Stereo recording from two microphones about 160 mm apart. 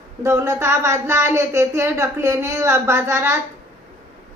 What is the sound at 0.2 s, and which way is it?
A woman's voice, 15° right (ahead or behind).